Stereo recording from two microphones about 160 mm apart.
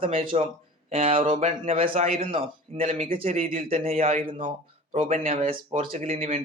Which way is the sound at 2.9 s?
55° right (ahead or behind).